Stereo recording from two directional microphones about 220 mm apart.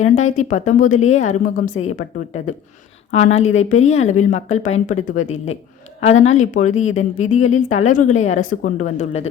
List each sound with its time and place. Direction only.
0.0 s a woman's voice: 30° left (ahead or behind)
3.1 s a woman's voice: 30° left (ahead or behind)